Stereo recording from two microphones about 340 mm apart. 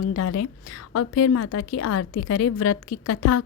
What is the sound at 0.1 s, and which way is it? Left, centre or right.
A woman's voice, left.